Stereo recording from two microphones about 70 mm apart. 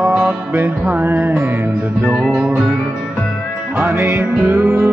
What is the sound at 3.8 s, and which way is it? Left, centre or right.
Music, right.